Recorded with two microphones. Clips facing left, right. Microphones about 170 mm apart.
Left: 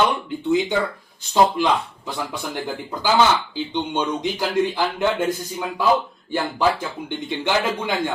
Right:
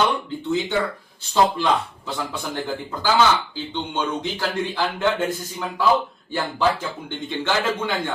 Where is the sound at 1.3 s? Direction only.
15° left (ahead or behind).